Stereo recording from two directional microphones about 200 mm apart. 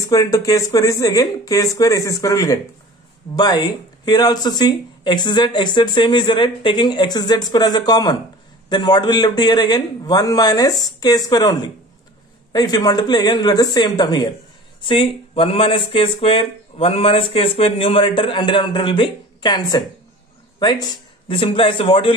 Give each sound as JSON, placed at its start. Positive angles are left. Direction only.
{"t": 0.1, "sound": "speech", "side_deg": 15}
{"t": 12.5, "sound": "a man's voice", "side_deg": 20}